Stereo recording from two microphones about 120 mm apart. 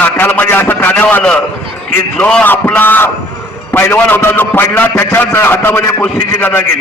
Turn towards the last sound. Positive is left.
turn(degrees=20)  # may be behind; listen again after turning